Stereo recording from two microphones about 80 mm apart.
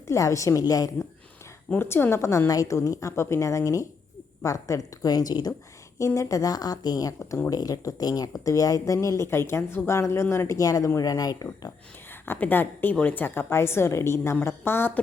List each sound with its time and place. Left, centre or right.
0.1 s a woman's voice: left
1.7 s a woman's voice: left
6.0 s speech: left
12.2 s a woman's voice: left